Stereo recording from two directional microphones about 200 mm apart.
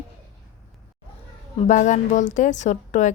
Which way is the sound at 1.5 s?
35° left (ahead or behind).